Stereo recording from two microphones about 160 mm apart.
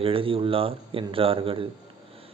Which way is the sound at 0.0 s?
35° right (ahead or behind).